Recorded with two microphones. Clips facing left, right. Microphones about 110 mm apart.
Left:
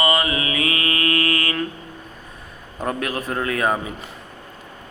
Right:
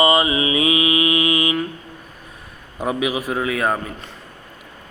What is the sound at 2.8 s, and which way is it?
A man's voice, 5° right (ahead or behind).